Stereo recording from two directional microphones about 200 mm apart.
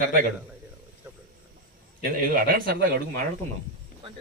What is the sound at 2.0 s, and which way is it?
Speech, 45° right (ahead or behind).